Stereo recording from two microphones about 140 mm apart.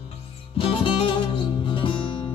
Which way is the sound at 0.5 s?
40° left (ahead or behind).